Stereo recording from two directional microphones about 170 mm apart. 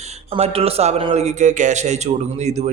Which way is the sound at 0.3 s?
35° right (ahead or behind).